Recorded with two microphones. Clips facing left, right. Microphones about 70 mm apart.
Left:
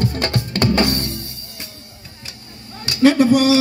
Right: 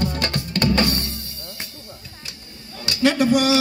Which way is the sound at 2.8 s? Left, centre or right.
Left.